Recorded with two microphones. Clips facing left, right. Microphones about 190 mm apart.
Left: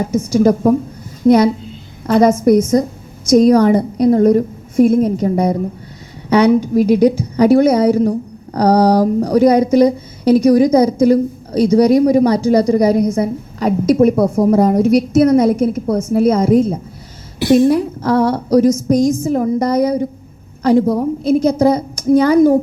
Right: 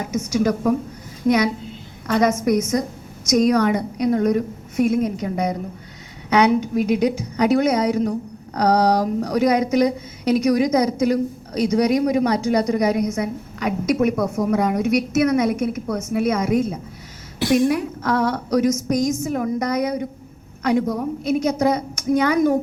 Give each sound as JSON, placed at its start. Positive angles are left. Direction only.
{"t": 0.0, "sound": "speech", "side_deg": 30}
{"t": 2.2, "sound": "speech", "side_deg": 30}